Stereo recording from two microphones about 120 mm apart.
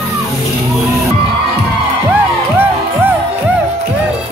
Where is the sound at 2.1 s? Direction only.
15° right (ahead or behind).